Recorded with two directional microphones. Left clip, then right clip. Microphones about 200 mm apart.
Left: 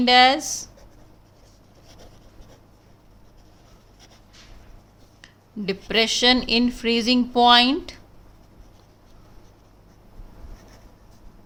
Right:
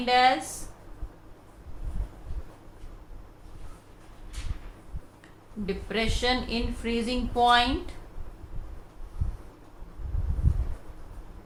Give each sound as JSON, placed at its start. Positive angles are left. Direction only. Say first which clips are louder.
{"t": 0.0, "sound": "speech", "louder": "left 6 dB", "side_deg": 45}
{"t": 5.2, "sound": "speech", "louder": "left 6 dB", "side_deg": 50}